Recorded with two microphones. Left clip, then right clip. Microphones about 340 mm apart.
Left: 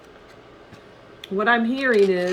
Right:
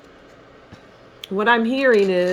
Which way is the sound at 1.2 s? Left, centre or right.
Right.